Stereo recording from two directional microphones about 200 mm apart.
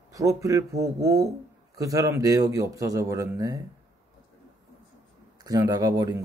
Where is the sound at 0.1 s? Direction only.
15° right (ahead or behind).